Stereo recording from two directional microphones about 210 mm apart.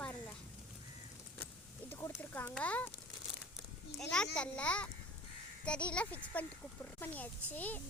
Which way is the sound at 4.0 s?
5° left (ahead or behind).